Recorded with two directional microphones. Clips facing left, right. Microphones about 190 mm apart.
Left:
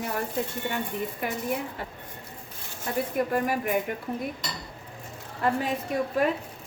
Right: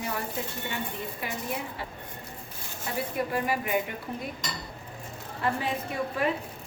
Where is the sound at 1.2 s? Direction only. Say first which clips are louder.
Left 4 dB; 50° left (ahead or behind).